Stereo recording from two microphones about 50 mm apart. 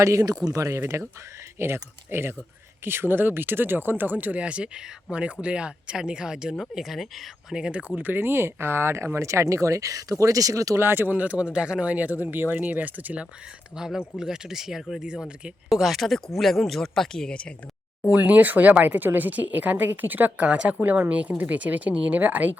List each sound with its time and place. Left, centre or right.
0.0 s speech: right
1.5 s speech: right; by 7.3 s centre
7.5 s speech: right
9.1 s speech: right
10.8 s speech: right
11.1 s speech: right
12.2 s speech: right
13.7 s speech: centre
18.1 s speech: right
20.4 s speech: right